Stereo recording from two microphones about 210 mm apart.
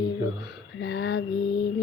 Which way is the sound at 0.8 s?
55° left (ahead or behind).